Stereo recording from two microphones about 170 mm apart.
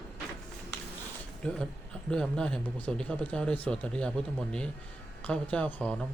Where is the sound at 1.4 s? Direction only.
5° left (ahead or behind).